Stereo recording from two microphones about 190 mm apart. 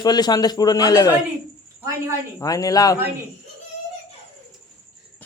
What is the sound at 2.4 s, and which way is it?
Speech, 20° left (ahead or behind).